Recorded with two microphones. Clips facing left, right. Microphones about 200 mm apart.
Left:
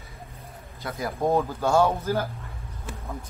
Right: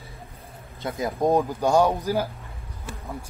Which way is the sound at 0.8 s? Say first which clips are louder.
Right 3 dB; 25° right (ahead or behind).